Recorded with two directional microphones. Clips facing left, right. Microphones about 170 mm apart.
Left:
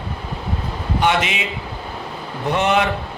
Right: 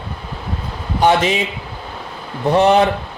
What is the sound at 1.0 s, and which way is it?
Speech, 35° right (ahead or behind).